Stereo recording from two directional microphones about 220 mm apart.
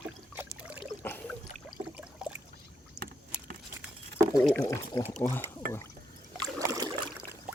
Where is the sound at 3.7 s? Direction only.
10° right (ahead or behind).